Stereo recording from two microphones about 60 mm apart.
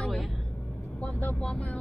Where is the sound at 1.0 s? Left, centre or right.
Left.